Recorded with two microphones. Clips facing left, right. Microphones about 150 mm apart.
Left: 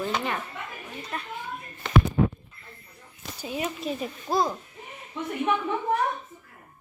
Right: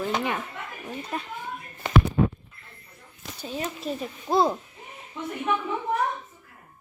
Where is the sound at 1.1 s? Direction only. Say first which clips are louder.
Right 2 dB; 25° right (ahead or behind).